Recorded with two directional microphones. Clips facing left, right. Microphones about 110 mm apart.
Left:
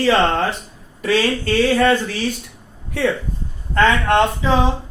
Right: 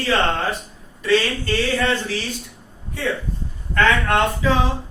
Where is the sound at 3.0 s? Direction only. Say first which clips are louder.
Left 6 dB; 70° left (ahead or behind).